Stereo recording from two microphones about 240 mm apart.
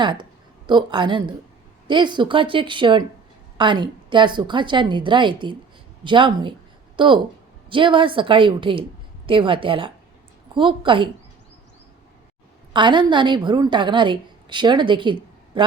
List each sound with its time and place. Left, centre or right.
0.0 s a woman's voice: centre
12.7 s a woman's voice: centre